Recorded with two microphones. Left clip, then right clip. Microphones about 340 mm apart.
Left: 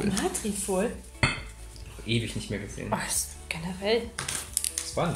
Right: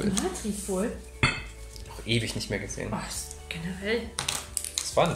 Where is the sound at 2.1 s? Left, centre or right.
Centre.